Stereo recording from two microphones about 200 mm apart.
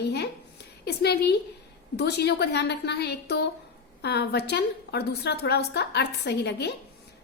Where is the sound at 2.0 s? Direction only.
55° left (ahead or behind).